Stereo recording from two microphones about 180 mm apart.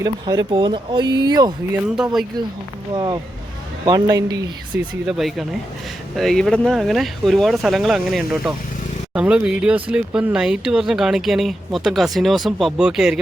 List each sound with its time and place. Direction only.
0.0 s speech: 20° right (ahead or behind)
2.9 s speech: 25° right (ahead or behind)
4.8 s speech: centre (ahead or behind)